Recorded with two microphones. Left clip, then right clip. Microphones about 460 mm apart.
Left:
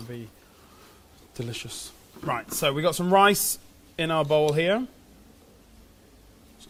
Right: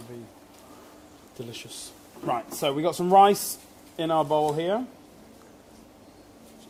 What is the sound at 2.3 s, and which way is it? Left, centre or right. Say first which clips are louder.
Speech: left 1 dB; left.